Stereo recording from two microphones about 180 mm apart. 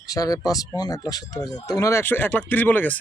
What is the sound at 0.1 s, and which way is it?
Speech, 20° left (ahead or behind).